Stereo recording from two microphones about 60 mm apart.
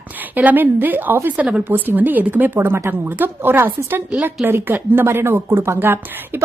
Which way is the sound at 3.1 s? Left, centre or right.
Right.